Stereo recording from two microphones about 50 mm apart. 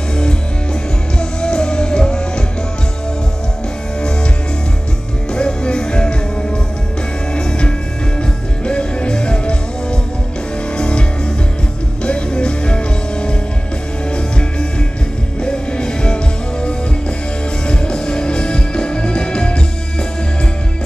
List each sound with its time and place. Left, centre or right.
1.4 s music: centre
5.3 s music: centre
7.3 s music: centre
17.6 s music: centre